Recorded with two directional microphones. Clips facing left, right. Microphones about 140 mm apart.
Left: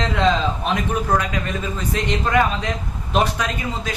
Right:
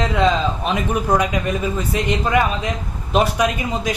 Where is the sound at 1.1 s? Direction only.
15° right (ahead or behind).